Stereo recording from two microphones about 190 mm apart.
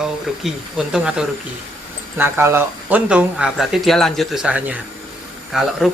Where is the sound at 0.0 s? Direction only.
5° right (ahead or behind).